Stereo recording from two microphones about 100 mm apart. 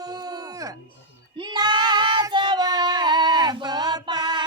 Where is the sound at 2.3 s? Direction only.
50° right (ahead or behind).